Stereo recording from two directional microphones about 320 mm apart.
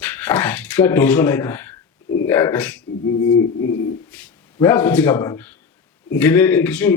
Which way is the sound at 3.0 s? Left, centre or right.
Left.